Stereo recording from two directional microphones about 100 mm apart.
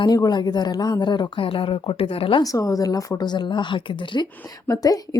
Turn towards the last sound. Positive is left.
turn(degrees=40)  # may be behind; listen again after turning